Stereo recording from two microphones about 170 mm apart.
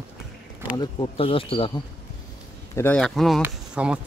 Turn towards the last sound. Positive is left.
turn(degrees=-5)  # may be behind; listen again after turning